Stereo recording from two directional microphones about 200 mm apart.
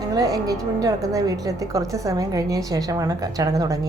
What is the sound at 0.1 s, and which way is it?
A woman's voice, 15° right (ahead or behind).